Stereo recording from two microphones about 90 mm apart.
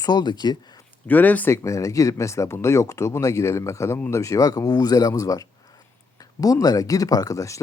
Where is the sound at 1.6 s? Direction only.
35° left (ahead or behind).